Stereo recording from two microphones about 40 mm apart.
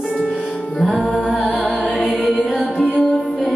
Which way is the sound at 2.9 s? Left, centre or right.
Left.